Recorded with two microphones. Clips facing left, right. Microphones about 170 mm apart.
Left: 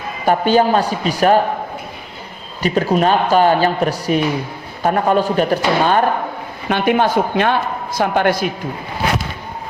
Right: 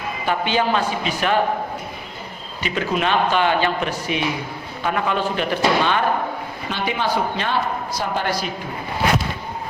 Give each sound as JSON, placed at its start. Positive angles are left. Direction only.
{"t": 0.3, "sound": "a man's voice", "side_deg": 45}
{"t": 2.6, "sound": "a man's voice", "side_deg": 40}
{"t": 6.7, "sound": "speech", "side_deg": 55}